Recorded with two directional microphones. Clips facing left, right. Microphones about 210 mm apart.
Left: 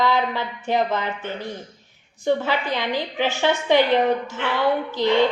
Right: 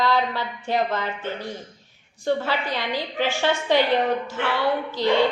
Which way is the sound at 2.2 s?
15° left (ahead or behind).